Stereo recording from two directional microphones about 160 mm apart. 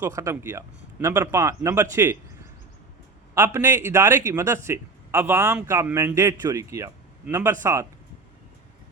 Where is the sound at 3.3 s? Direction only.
15° right (ahead or behind).